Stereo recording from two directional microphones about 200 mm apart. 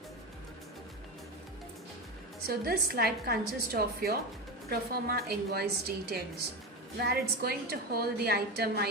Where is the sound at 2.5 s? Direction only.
50° right (ahead or behind).